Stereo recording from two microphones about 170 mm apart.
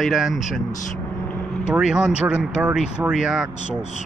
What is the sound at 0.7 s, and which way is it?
Speech, 50° left (ahead or behind).